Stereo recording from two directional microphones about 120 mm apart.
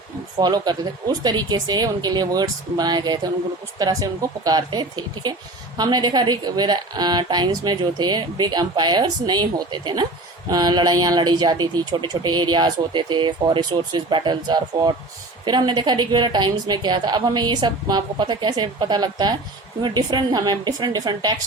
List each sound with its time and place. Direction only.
0.3 s speech: 35° right (ahead or behind)